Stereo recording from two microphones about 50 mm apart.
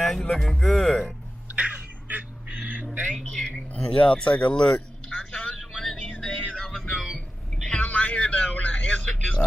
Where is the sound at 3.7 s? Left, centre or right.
Left.